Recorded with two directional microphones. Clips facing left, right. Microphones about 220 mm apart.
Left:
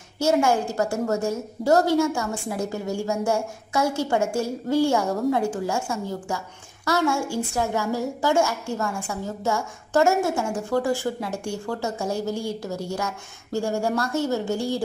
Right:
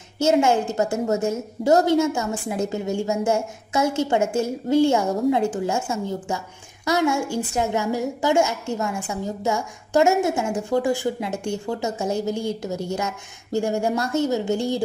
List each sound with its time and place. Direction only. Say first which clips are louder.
0.2 s a woman's voice: right 2 dB; 20° right (ahead or behind)